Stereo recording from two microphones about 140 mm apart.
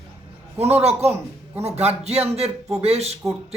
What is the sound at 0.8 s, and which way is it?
A woman's voice, 50° right (ahead or behind).